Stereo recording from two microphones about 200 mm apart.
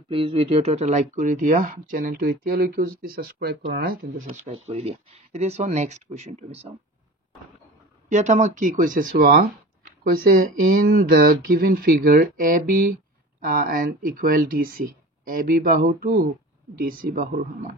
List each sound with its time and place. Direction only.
0.1 s speech: 30° right (ahead or behind); by 4.1 s 50° right (ahead or behind)
4.3 s speech: 30° right (ahead or behind)
8.1 s speech: 35° right (ahead or behind)
10.9 s speech: 50° right (ahead or behind)